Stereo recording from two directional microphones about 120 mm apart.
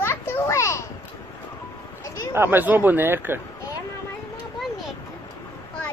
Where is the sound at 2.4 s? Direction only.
15° right (ahead or behind).